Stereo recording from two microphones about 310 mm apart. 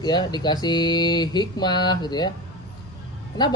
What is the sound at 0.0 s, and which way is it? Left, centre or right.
Speech, centre.